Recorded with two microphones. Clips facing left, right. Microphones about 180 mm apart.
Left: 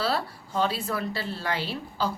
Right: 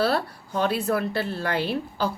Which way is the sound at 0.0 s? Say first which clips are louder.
Right 4 dB; 55° right (ahead or behind).